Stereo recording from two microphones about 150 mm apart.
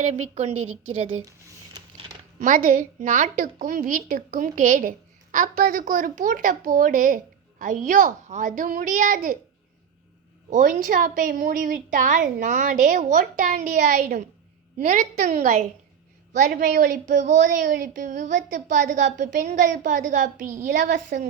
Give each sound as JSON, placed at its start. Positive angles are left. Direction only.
{"t": 0.0, "sound": "a woman's voice", "side_deg": -45}
{"t": 2.4, "sound": "a woman's voice", "side_deg": -60}
{"t": 10.5, "sound": "a woman's voice", "side_deg": -60}
{"t": 16.3, "sound": "a woman's voice", "side_deg": -70}